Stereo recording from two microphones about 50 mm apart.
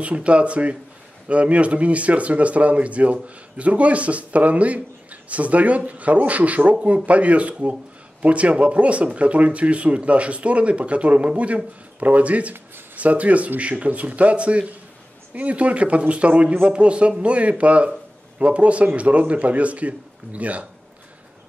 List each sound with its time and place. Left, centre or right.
0.0 s speech: right